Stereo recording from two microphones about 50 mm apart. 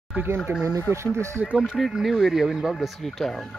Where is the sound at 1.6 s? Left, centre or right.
Centre.